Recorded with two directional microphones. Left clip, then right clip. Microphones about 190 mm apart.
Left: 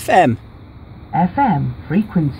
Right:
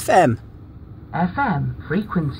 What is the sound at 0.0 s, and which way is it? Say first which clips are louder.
Speech: left 2 dB; centre (ahead or behind).